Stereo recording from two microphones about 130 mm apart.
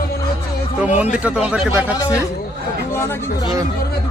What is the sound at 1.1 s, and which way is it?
Speech, 10° right (ahead or behind).